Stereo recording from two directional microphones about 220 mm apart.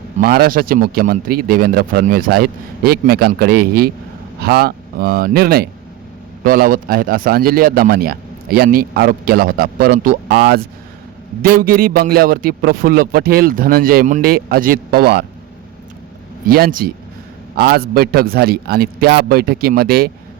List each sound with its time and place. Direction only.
0.2 s a man's voice: 40° right (ahead or behind)
16.5 s a man's voice: 40° right (ahead or behind)